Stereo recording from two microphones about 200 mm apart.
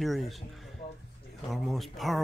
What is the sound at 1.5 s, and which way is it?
Speech, centre (ahead or behind).